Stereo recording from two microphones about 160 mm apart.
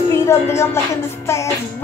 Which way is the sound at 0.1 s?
15° left (ahead or behind).